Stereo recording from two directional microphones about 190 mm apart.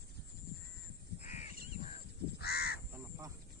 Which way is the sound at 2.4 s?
55° left (ahead or behind).